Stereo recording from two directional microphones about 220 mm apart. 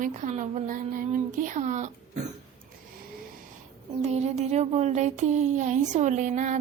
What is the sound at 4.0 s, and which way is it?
Speech, 30° right (ahead or behind).